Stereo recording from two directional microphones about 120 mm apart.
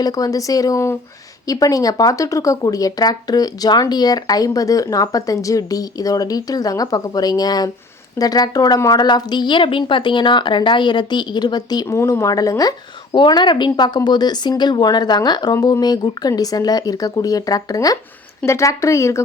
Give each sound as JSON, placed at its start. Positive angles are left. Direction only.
{"t": 0.0, "sound": "speech", "side_deg": 30}